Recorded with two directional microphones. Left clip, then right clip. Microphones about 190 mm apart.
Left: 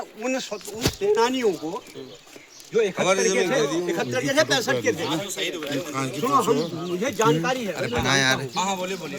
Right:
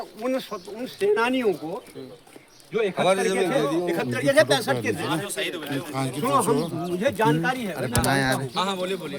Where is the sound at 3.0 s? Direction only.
75° right (ahead or behind).